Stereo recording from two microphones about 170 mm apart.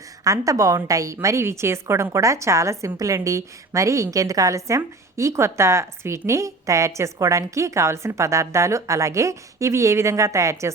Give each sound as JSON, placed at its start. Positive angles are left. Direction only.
{"t": 0.3, "sound": "a woman's voice", "side_deg": -20}